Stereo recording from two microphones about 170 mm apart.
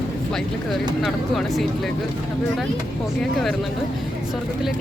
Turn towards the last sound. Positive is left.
turn(degrees=0)  # may be behind; listen again after turning